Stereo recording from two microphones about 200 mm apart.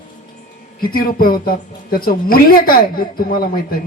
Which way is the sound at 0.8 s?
45° left (ahead or behind).